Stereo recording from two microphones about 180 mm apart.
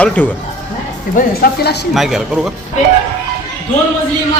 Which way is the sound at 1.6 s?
65° left (ahead or behind).